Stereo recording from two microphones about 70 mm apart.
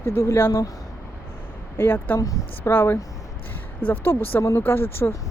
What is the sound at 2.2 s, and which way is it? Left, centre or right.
Speech, left.